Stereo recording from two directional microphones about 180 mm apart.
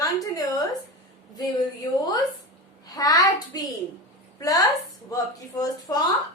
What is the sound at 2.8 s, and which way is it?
Speech, 20° left (ahead or behind).